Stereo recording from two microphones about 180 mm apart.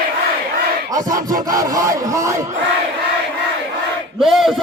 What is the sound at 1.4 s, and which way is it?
Speech, 20° right (ahead or behind).